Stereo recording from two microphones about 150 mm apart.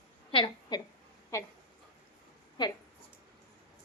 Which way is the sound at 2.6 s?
30° left (ahead or behind).